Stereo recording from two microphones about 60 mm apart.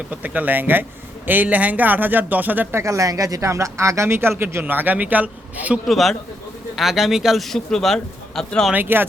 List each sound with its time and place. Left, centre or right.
0.1 s speech: right
2.7 s speech: right
5.8 s a man's voice: centre
8.7 s speech: right